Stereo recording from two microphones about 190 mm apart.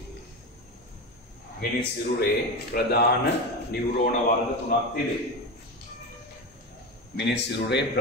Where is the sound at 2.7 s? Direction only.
55° left (ahead or behind).